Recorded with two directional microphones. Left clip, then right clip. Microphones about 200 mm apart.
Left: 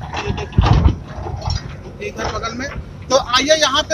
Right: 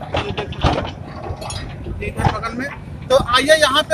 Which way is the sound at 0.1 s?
35° right (ahead or behind).